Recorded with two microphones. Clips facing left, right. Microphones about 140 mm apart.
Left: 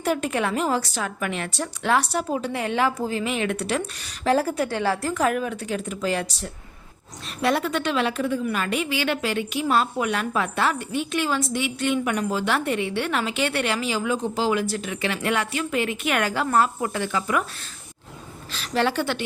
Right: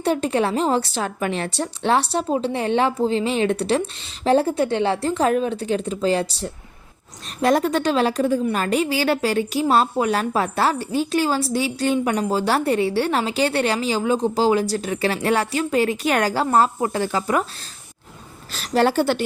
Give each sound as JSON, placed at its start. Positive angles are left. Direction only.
{"t": 0.0, "sound": "a woman's voice", "side_deg": -30}
{"t": 18.5, "sound": "a woman's voice", "side_deg": -40}